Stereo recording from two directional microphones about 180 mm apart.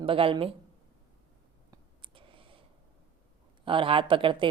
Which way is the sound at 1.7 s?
30° right (ahead or behind).